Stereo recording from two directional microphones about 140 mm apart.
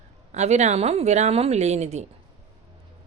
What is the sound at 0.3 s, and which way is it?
A woman's voice, 55° right (ahead or behind).